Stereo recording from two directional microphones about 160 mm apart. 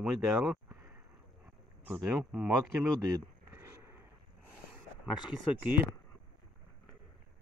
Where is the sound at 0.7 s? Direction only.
20° right (ahead or behind).